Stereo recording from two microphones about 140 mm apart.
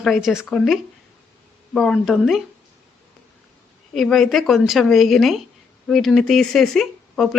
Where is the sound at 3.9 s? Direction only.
Centre (ahead or behind).